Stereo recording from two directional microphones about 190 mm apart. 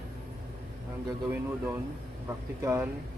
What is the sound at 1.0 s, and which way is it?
Speech, 15° right (ahead or behind).